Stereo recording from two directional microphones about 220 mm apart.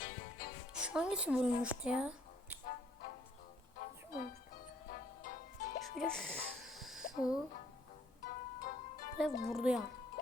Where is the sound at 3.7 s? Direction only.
40° left (ahead or behind).